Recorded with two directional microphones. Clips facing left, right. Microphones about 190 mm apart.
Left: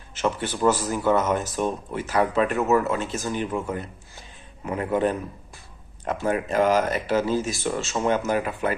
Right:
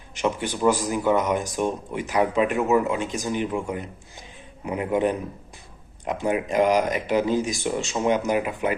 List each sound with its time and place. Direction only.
0.1 s speech: 15° right (ahead or behind)